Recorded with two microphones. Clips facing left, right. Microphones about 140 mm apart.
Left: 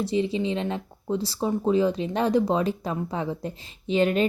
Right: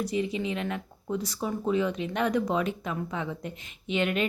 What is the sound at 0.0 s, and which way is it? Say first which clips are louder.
Speech: left 4 dB; 30° left (ahead or behind).